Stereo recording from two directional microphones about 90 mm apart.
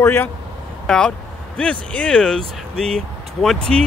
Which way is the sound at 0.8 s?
10° left (ahead or behind).